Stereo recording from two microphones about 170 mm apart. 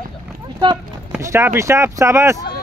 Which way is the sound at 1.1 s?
15° right (ahead or behind).